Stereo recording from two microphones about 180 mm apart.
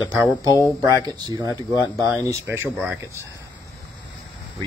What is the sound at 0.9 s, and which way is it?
A man's voice, 20° right (ahead or behind).